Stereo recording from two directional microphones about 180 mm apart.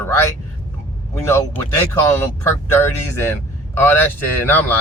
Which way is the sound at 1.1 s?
15° left (ahead or behind).